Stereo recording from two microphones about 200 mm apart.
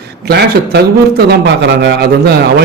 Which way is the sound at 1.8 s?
55° right (ahead or behind).